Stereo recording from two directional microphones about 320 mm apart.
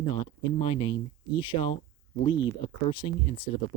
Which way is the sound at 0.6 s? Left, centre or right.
Centre.